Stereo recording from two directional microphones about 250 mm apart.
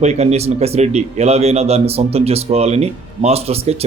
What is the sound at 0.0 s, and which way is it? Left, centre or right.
A man's voice, right.